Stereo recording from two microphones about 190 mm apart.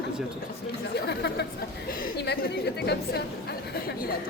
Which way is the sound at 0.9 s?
60° left (ahead or behind).